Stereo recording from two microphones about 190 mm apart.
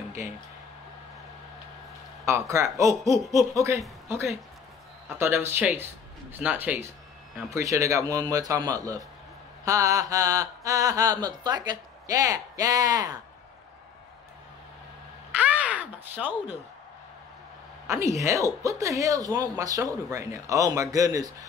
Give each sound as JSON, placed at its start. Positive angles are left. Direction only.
{"t": 2.2, "sound": "mantra", "side_deg": -15}
{"t": 5.1, "sound": "mantra", "side_deg": -15}
{"t": 15.3, "sound": "a sound", "side_deg": -5}
{"t": 17.8, "sound": "speech", "side_deg": -15}
{"t": 18.2, "sound": "mantra", "side_deg": -15}